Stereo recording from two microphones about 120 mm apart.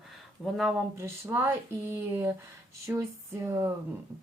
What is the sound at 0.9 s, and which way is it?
A woman's voice, 20° right (ahead or behind).